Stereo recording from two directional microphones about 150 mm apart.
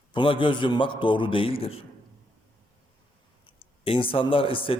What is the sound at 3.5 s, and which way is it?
Speech, 35° left (ahead or behind).